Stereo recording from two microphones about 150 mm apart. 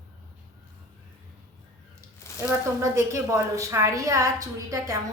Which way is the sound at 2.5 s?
20° right (ahead or behind).